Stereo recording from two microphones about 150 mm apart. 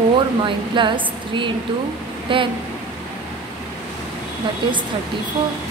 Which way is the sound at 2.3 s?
35° right (ahead or behind).